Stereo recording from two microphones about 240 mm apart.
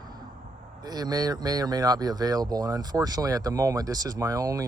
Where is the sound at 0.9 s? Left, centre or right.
Centre.